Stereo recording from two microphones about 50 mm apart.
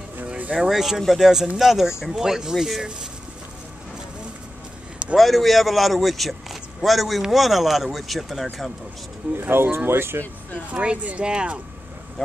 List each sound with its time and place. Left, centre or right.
0.6 s speech: centre
5.1 s a man's voice: centre
9.4 s speech: right
10.7 s speech: right